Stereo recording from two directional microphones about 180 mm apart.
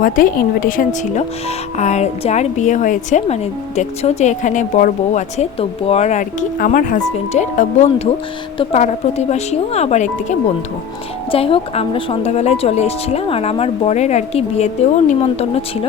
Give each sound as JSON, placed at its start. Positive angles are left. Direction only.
{"t": 0.0, "sound": "speech", "side_deg": 50}
{"t": 11.3, "sound": "speech", "side_deg": 30}